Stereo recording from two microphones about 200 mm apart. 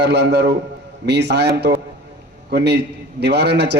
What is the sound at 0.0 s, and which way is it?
A man's voice, 60° right (ahead or behind).